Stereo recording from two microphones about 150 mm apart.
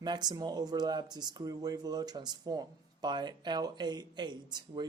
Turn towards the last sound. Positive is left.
turn(degrees=-30)  # may be behind; listen again after turning